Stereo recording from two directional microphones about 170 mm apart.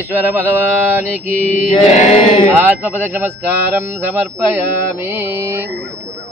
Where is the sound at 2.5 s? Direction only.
10° right (ahead or behind).